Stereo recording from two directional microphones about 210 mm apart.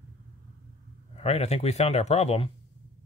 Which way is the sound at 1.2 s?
30° left (ahead or behind).